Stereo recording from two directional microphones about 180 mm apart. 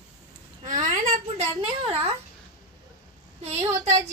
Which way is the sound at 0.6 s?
45° right (ahead or behind).